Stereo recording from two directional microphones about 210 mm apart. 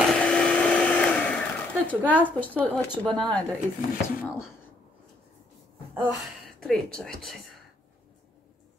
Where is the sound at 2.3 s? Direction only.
10° left (ahead or behind).